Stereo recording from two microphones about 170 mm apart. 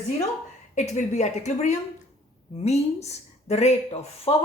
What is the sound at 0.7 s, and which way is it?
A woman's voice, 45° left (ahead or behind).